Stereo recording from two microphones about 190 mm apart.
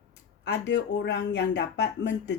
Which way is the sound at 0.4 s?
65° left (ahead or behind).